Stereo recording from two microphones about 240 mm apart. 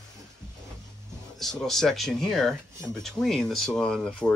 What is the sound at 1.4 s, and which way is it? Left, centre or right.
Speech, centre.